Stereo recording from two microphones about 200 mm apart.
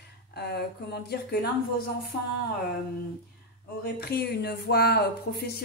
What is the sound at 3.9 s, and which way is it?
A woman's voice, 50° left (ahead or behind).